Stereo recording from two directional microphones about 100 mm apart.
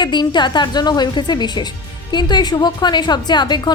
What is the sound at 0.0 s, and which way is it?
A woman's voice, 50° left (ahead or behind).